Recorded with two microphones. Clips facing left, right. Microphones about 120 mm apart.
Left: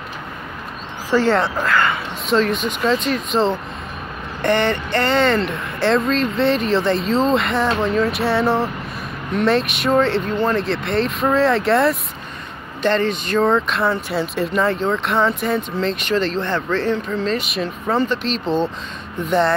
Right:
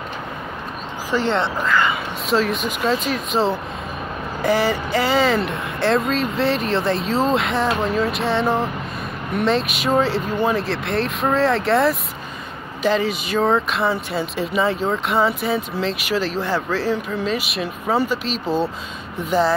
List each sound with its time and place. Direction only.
1.1 s speech: 25° right (ahead or behind)
1.4 s speech: centre (ahead or behind)